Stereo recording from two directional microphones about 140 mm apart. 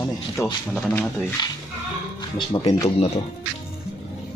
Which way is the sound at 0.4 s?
20° left (ahead or behind).